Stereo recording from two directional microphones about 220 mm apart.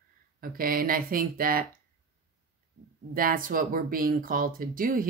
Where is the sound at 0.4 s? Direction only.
40° right (ahead or behind).